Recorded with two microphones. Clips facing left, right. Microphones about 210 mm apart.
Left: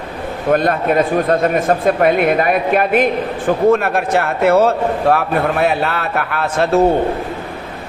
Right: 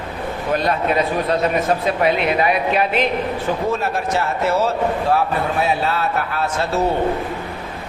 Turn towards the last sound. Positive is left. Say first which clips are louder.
# left 6 dB
turn(degrees=60)  # may be behind; listen again after turning